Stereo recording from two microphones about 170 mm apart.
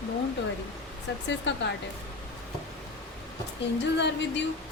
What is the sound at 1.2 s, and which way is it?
Speech, 90° left.